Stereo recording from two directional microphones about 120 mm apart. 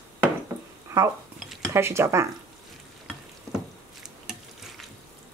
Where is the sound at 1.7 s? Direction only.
20° right (ahead or behind).